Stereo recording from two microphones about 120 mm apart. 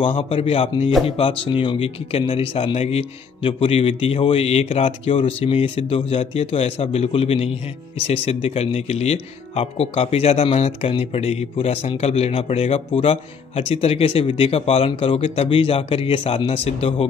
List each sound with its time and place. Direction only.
0.0 s speech: 50° left (ahead or behind)